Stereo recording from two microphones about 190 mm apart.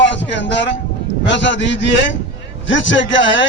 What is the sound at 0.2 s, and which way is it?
A man's voice, 70° left (ahead or behind).